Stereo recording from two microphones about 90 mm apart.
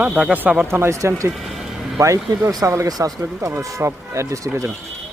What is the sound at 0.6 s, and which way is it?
Speech, 30° right (ahead or behind).